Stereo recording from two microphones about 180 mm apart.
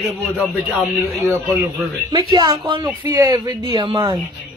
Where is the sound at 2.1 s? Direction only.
25° right (ahead or behind).